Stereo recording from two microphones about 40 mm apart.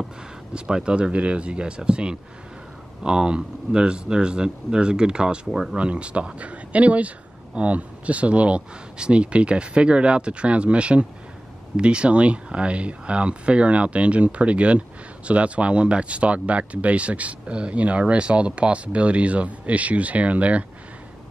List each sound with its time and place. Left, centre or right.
0.7 s speech: right